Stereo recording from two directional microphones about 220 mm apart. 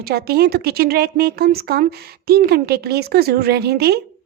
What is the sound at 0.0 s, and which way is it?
A woman's voice, 45° right (ahead or behind).